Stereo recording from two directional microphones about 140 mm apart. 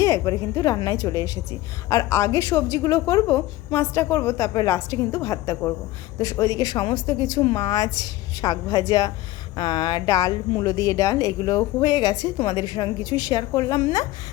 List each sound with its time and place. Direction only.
0.0 s a woman's voice: 20° left (ahead or behind)